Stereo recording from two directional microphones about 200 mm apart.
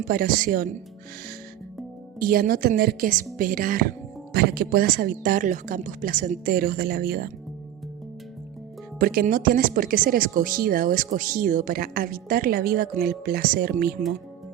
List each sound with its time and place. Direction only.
0.1 s speech: 45° right (ahead or behind)
2.1 s speech: 45° right (ahead or behind)
9.0 s speech: 45° right (ahead or behind)